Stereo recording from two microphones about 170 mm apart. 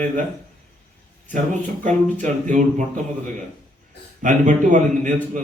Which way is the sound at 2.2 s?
45° right (ahead or behind).